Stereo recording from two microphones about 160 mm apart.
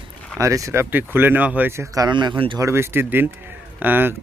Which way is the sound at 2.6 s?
15° right (ahead or behind).